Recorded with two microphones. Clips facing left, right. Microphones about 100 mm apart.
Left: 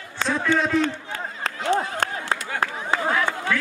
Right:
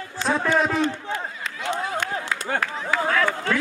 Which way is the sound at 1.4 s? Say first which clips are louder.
Left 4 dB; 35° left (ahead or behind).